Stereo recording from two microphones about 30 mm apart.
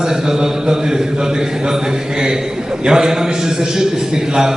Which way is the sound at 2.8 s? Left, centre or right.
Right.